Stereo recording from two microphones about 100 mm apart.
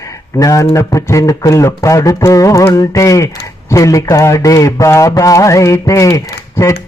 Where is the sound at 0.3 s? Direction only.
35° left (ahead or behind).